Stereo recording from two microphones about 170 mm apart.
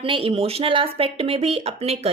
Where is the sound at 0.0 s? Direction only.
30° right (ahead or behind).